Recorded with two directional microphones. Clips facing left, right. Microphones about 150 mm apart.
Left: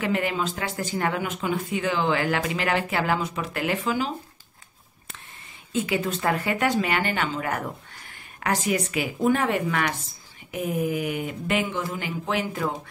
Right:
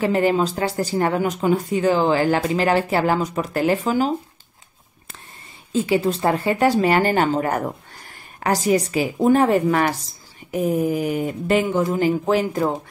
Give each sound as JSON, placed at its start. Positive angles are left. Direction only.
{"t": 0.0, "sound": "speech", "side_deg": -35}
{"t": 5.7, "sound": "speech", "side_deg": -30}